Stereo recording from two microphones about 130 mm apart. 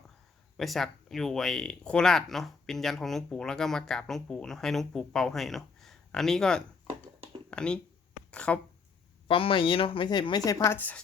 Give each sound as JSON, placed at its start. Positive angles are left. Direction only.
{"t": 0.5, "sound": "speech", "side_deg": 0}
{"t": 9.2, "sound": "a woman's voice", "side_deg": 45}